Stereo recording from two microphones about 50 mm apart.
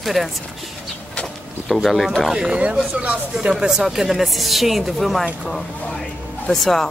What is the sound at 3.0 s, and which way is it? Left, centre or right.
Speech, right.